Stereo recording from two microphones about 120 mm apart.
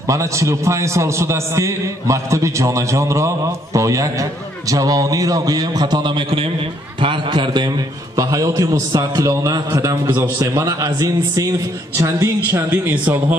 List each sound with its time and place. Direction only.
0.0 s a man's voice: 25° right (ahead or behind)